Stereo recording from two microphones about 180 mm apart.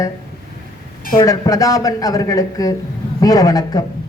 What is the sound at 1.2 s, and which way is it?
A woman's voice, 20° left (ahead or behind).